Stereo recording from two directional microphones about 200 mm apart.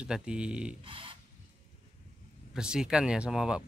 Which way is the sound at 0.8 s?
25° right (ahead or behind).